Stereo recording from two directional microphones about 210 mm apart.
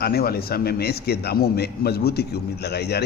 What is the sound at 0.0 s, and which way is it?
A man's voice, 45° left (ahead or behind).